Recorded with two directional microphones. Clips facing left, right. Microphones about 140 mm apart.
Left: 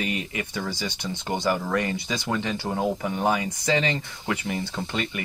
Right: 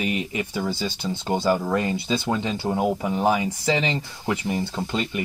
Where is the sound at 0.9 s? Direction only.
30° right (ahead or behind).